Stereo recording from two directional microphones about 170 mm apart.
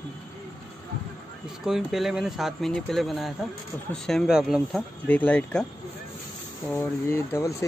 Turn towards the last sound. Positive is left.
turn(degrees=15)  # may be behind; listen again after turning